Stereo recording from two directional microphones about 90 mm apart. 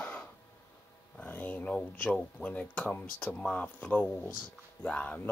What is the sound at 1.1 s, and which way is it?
Speech, 20° left (ahead or behind).